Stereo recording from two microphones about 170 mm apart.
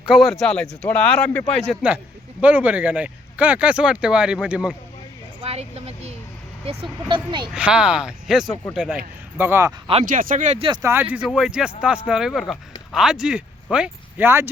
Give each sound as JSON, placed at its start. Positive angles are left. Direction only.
{"t": 0.0, "sound": "speech", "side_deg": 0}
{"t": 5.4, "sound": "a sound", "side_deg": -35}
{"t": 7.1, "sound": "speech", "side_deg": -25}
{"t": 7.5, "sound": "speech", "side_deg": -5}
{"t": 9.4, "sound": "speech", "side_deg": -15}
{"t": 10.0, "sound": "speech", "side_deg": -50}
{"t": 10.7, "sound": "speech", "side_deg": -15}